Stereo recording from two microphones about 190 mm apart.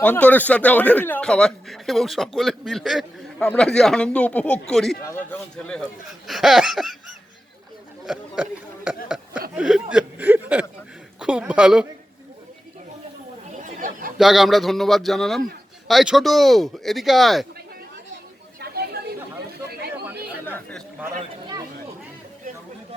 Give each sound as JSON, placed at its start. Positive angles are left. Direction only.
{"t": 0.0, "sound": "speech", "side_deg": 10}
{"t": 8.0, "sound": "chatter", "side_deg": -5}
{"t": 9.0, "sound": "a sound", "side_deg": -5}
{"t": 9.6, "sound": "speech", "side_deg": -5}
{"t": 13.6, "sound": "chatter", "side_deg": -45}
{"t": 14.2, "sound": "speech", "side_deg": 0}
{"t": 18.6, "sound": "chatter", "side_deg": -55}